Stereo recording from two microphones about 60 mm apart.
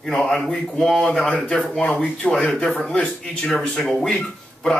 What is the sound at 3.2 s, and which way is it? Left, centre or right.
Speech, centre.